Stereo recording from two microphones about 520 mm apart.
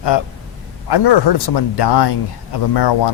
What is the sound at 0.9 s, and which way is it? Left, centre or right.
Speech, left.